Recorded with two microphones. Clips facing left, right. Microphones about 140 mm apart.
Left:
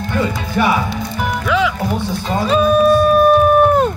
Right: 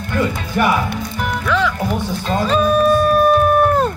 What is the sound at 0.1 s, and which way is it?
Speech, 15° left (ahead or behind).